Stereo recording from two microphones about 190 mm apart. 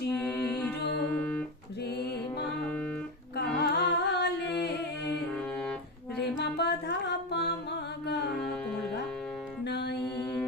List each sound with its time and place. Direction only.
0.1 s mantra: 10° left (ahead or behind)
3.3 s humming: 60° left (ahead or behind)
6.3 s music: 60° left (ahead or behind)
9.6 s music: 60° left (ahead or behind)